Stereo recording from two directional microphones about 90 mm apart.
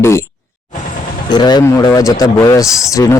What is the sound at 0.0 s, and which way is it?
Speech, 30° left (ahead or behind).